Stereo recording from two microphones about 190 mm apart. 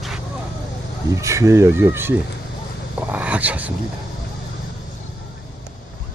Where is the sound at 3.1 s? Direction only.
10° right (ahead or behind).